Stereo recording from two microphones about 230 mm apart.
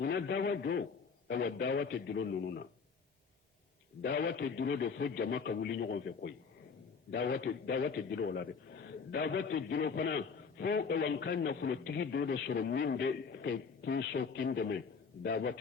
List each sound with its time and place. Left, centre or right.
0.0 s a man's voice: left
4.2 s a man's voice: left